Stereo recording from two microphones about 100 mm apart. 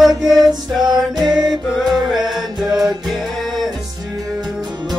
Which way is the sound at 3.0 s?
Centre (ahead or behind).